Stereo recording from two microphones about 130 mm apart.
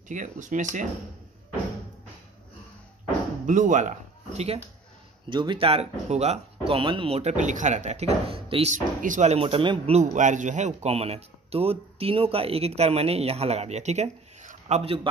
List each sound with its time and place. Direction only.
0.1 s speech: 75° right (ahead or behind)
3.4 s speech: 75° right (ahead or behind); by 4.6 s 55° right (ahead or behind)
5.3 s speech: 35° right (ahead or behind)
8.7 s speech: 75° right (ahead or behind); by 9.9 s 45° right (ahead or behind)
9.9 s speech: 70° right (ahead or behind)